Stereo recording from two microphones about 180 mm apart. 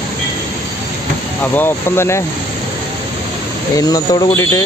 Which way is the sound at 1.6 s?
15° left (ahead or behind).